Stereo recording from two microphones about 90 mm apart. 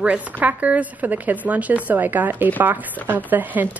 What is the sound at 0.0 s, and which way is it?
A woman's voice, 15° right (ahead or behind).